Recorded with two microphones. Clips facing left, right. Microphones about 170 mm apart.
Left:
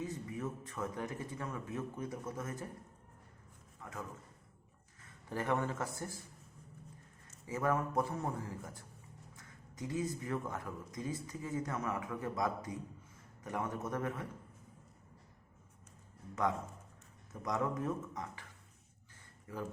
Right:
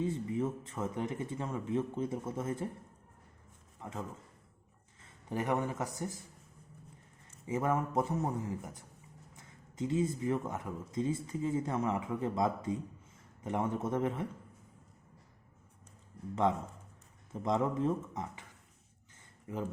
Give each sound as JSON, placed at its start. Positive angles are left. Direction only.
{"t": 0.0, "sound": "speech", "side_deg": -25}
{"t": 3.8, "sound": "a man's voice", "side_deg": -25}
{"t": 5.0, "sound": "a man's voice", "side_deg": -20}
{"t": 7.4, "sound": "speech", "side_deg": -20}
{"t": 16.4, "sound": "speech", "side_deg": -25}
{"t": 19.5, "sound": "speech", "side_deg": -20}